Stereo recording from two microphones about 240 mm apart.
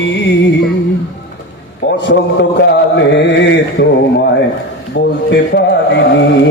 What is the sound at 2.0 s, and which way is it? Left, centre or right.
Mantra, left.